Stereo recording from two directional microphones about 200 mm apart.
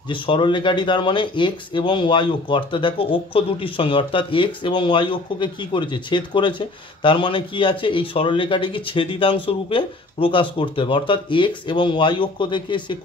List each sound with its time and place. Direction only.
0.1 s speech: 25° left (ahead or behind)